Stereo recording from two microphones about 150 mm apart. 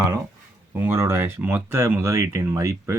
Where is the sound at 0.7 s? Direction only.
15° right (ahead or behind).